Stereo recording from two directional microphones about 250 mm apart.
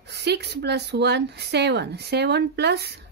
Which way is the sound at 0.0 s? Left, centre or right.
Right.